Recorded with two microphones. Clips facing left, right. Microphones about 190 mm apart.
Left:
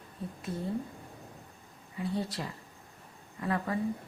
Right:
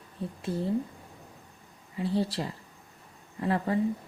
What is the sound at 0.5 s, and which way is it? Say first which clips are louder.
Speech: right 6 dB; 30° right (ahead or behind).